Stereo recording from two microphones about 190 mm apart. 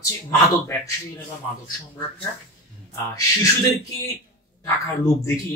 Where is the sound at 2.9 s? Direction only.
15° left (ahead or behind).